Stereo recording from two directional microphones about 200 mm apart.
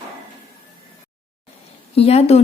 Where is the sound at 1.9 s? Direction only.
30° left (ahead or behind).